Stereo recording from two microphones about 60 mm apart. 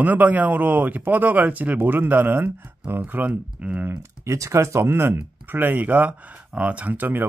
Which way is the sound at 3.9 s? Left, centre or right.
Right.